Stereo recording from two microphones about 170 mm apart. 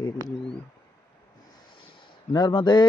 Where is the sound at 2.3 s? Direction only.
25° left (ahead or behind).